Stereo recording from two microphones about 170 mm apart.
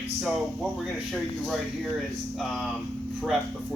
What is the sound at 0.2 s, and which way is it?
Speech, 5° right (ahead or behind).